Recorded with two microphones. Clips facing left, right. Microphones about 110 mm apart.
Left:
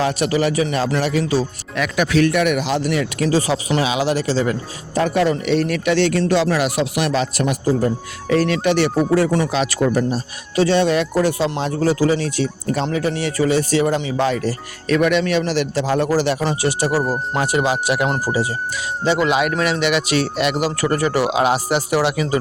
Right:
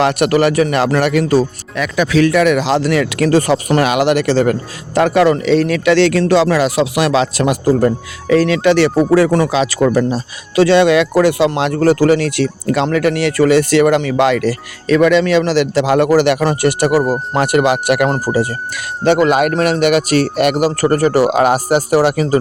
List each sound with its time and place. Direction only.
0.0 s speech: 65° right (ahead or behind)
2.4 s speech: 90° right; by 4.5 s 65° right (ahead or behind)
4.9 s speech: 90° right; by 7.9 s 70° right (ahead or behind)
8.4 s speech: 90° right
10.5 s speech: 90° right; by 22.4 s 45° right (ahead or behind)